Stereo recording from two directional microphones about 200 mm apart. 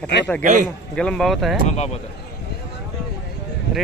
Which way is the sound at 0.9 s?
Centre (ahead or behind).